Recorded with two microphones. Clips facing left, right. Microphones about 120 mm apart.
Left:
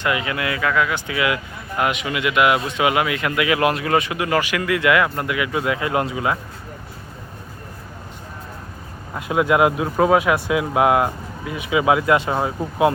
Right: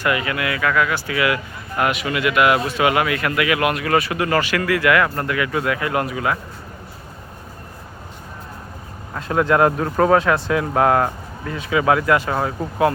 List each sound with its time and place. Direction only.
0.0 s speech: 20° left (ahead or behind)
9.1 s speech: 10° left (ahead or behind)